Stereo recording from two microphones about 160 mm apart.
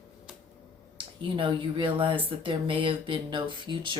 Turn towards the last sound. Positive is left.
turn(degrees=-30)  # may be behind; listen again after turning